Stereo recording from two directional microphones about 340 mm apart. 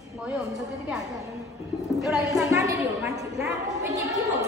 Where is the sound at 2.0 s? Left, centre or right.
Centre.